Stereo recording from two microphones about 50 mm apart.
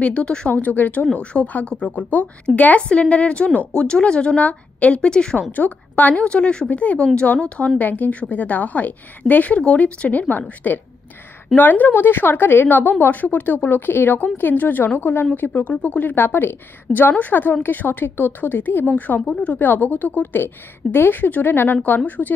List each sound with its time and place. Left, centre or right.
0.0 s speech: left
0.5 s a woman's voice: left
1.1 s a woman's voice: left
5.5 s a woman's voice: left
6.2 s speech: centre
6.7 s speech: left
7.8 s a woman's voice: left
18.9 s a woman's voice: left